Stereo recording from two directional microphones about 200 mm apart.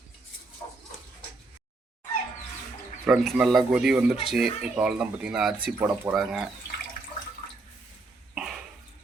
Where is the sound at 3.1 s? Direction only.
Centre (ahead or behind).